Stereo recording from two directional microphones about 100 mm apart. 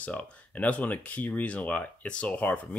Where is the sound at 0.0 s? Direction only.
15° left (ahead or behind).